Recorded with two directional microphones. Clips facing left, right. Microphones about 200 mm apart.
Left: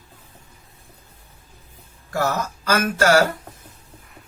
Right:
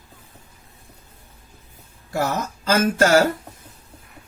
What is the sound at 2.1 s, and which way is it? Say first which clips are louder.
Speech: even; 20° right (ahead or behind).